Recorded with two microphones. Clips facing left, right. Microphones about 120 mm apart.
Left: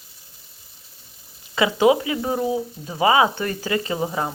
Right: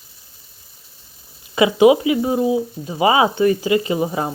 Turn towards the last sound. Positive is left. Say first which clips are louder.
# right 4 dB
turn(degrees=-20)  # may be behind; listen again after turning